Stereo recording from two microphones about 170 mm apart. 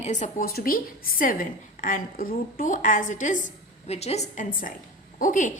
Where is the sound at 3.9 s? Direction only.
40° left (ahead or behind).